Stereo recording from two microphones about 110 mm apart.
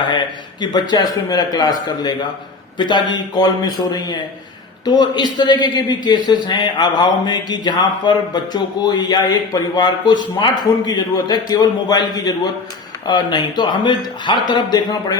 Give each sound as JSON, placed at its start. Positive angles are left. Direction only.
{"t": 0.6, "sound": "a man's voice", "side_deg": 40}
{"t": 4.9, "sound": "a man's voice", "side_deg": 40}